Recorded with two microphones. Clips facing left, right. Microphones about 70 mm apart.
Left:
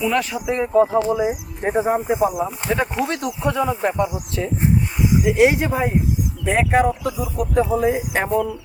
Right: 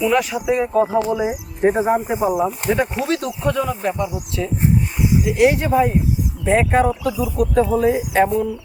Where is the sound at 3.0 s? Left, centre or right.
Centre.